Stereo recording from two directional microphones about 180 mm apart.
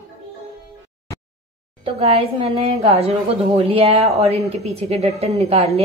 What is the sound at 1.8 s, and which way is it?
A woman's voice, 35° right (ahead or behind).